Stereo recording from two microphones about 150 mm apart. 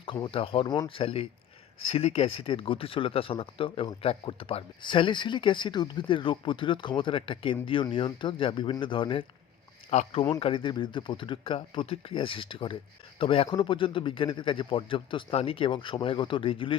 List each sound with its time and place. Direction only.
0.0 s speech: 35° left (ahead or behind)
9.9 s speech: 45° left (ahead or behind)
10.4 s speech: 35° left (ahead or behind)